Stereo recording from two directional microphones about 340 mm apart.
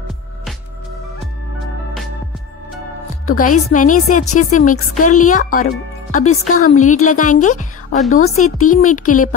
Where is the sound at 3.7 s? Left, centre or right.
Left.